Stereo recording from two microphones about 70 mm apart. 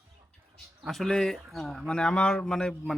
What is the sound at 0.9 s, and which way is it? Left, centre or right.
Speech, centre.